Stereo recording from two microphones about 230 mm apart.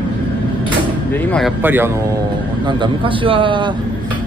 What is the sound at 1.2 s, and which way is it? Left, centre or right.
Speech, centre.